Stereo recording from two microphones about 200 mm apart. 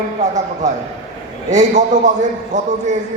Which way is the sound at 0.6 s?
15° right (ahead or behind).